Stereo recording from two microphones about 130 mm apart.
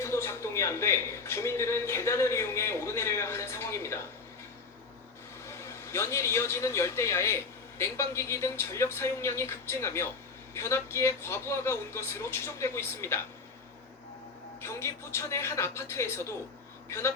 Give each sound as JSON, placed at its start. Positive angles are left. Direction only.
{"t": 0.0, "sound": "a man's voice", "side_deg": 20}
{"t": 5.5, "sound": "a man's voice", "side_deg": 20}
{"t": 14.6, "sound": "a man's voice", "side_deg": 20}